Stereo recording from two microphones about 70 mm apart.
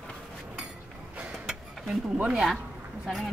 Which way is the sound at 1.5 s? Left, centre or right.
Centre.